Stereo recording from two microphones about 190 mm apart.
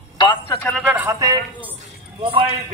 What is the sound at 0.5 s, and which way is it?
Speech, 5° left (ahead or behind).